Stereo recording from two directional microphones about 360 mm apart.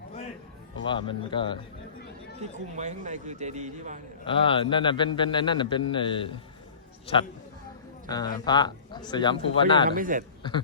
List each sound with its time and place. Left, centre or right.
0.9 s a man's voice: centre
2.4 s speech: centre
4.3 s a man's voice: centre
9.9 s speech: right